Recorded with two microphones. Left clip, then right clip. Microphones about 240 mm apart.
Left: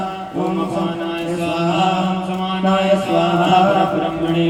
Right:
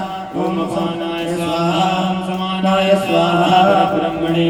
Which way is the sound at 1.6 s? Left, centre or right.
Right.